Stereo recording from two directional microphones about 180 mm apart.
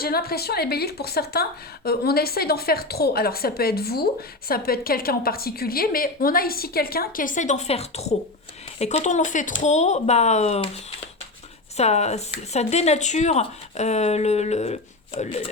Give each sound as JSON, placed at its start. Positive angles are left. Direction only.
{"t": 0.0, "sound": "a woman's voice", "side_deg": 60}
{"t": 11.8, "sound": "speech", "side_deg": 35}